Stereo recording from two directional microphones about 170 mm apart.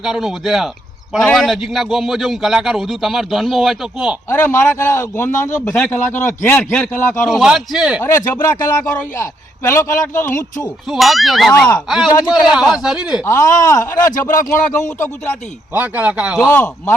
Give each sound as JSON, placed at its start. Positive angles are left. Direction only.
{"t": 0.0, "sound": "a man's voice", "side_deg": 0}
{"t": 4.3, "sound": "a man's voice", "side_deg": 15}
{"t": 8.8, "sound": "a man's voice", "side_deg": 10}
{"t": 13.2, "sound": "speech", "side_deg": 20}
{"t": 14.1, "sound": "speech", "side_deg": 50}
{"t": 15.7, "sound": "speech", "side_deg": -10}
{"t": 16.4, "sound": "a man's voice", "side_deg": 10}